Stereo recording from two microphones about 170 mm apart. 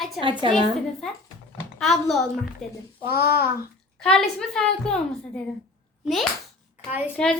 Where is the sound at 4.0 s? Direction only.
5° left (ahead or behind).